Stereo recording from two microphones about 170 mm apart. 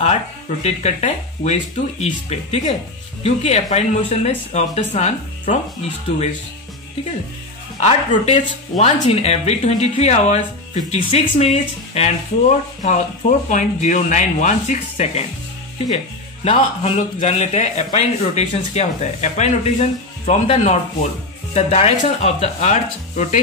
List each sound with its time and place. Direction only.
0.0 s speech: 40° left (ahead or behind)
7.8 s speech: 40° left (ahead or behind)
16.4 s speech: 35° left (ahead or behind)